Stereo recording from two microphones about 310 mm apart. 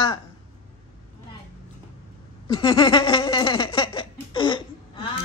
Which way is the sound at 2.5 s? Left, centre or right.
Centre.